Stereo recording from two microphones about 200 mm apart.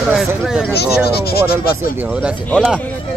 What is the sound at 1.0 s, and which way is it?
Speech, 55° left (ahead or behind).